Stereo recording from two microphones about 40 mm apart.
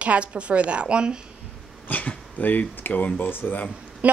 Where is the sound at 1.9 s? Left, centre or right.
Left.